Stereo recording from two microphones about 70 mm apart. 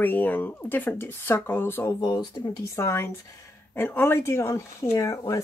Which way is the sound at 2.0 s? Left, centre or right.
Left.